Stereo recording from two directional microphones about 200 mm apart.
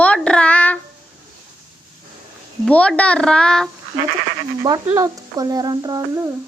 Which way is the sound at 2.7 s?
5° left (ahead or behind).